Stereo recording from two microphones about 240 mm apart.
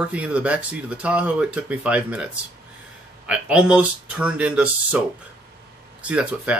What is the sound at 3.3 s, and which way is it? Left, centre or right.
Speech, centre.